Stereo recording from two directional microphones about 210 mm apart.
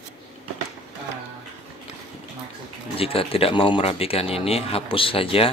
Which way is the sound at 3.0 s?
25° left (ahead or behind).